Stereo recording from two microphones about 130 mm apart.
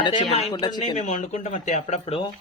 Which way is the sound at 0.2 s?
60° left (ahead or behind).